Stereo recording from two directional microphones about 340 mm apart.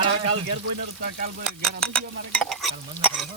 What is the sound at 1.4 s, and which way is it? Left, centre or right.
Speech, centre.